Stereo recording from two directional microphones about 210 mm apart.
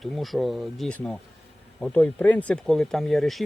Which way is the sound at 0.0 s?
Centre (ahead or behind).